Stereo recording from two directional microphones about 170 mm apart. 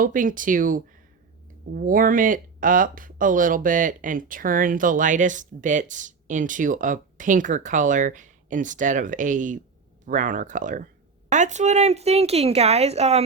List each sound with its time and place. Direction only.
0.0 s speech: 50° right (ahead or behind)